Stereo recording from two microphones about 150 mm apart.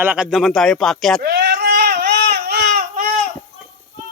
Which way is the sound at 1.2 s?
90° right.